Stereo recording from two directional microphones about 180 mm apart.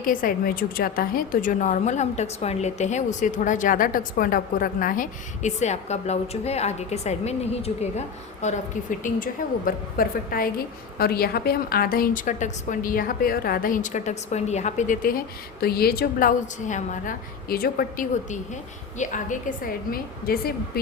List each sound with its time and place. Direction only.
0.0 s a woman's voice: 50° left (ahead or behind)
15.6 s speech: 60° left (ahead or behind)
16.6 s a woman's voice: 45° left (ahead or behind)